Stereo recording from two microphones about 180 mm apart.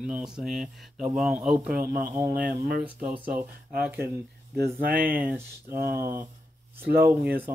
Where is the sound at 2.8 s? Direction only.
10° right (ahead or behind).